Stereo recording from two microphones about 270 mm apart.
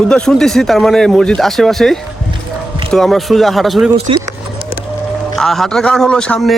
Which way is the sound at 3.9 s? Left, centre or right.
Right.